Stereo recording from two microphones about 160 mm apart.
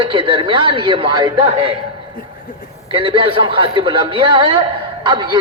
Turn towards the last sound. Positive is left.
turn(degrees=-30)  # may be behind; listen again after turning